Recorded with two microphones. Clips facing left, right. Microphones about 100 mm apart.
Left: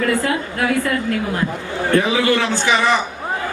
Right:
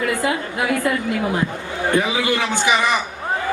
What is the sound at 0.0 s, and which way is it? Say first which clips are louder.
Speech: left 2 dB; 15° right (ahead or behind).